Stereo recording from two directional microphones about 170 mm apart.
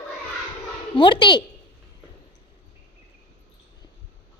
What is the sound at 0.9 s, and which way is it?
Speech, 30° left (ahead or behind).